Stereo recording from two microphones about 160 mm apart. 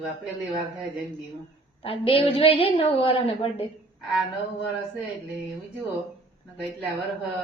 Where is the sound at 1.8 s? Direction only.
35° left (ahead or behind).